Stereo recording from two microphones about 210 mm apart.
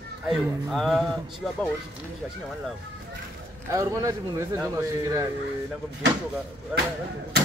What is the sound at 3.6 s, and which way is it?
Speech, 15° right (ahead or behind).